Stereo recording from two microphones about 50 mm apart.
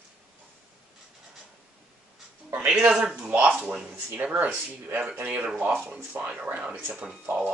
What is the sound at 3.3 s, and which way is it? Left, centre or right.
Speech, right.